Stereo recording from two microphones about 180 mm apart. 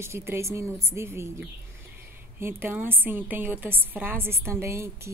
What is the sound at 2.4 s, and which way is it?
A woman's voice, 10° right (ahead or behind).